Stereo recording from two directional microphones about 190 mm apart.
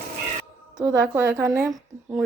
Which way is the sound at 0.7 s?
10° right (ahead or behind).